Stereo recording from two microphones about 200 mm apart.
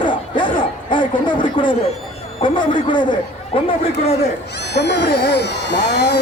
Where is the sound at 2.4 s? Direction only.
25° left (ahead or behind).